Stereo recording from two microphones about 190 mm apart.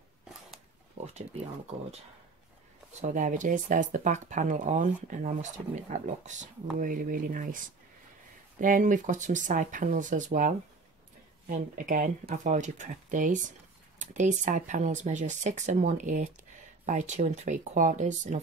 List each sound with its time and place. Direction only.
1.0 s speech: 35° right (ahead or behind)
3.0 s speech: 40° right (ahead or behind)